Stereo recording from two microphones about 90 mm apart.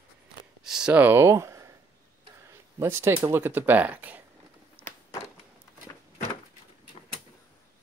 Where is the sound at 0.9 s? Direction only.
25° right (ahead or behind).